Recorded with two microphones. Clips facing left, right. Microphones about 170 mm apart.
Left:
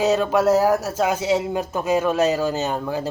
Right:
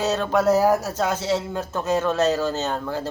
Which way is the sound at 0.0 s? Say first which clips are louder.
Left 3 dB; 10° left (ahead or behind).